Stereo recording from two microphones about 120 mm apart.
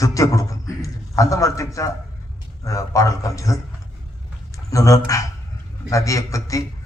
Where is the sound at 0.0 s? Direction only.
25° left (ahead or behind).